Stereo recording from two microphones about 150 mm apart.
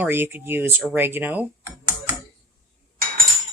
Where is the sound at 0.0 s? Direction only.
15° right (ahead or behind).